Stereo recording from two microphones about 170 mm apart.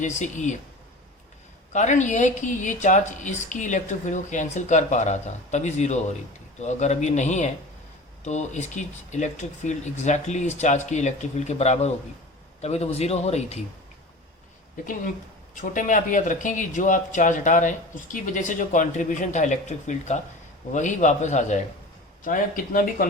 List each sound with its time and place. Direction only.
0.0 s speech: 45° left (ahead or behind)
1.7 s speech: 45° left (ahead or behind)
15.7 s speech: 50° left (ahead or behind)